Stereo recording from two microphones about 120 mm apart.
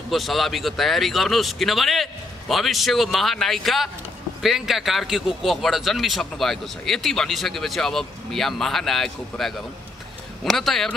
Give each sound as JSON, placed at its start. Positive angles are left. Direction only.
{"t": 0.1, "sound": "a man's voice", "side_deg": 0}